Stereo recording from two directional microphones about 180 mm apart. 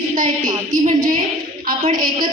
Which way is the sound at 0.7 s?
20° right (ahead or behind).